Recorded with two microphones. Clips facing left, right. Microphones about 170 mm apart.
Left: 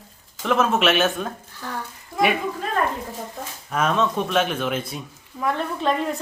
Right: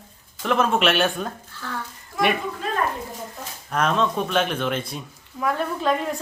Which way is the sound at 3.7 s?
5° left (ahead or behind).